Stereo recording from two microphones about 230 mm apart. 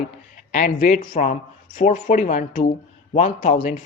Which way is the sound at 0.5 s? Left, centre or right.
Left.